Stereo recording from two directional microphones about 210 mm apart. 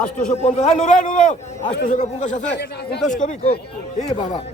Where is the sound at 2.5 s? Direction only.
50° left (ahead or behind).